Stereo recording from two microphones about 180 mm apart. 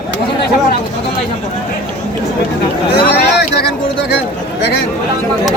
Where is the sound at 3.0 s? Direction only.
65° left (ahead or behind).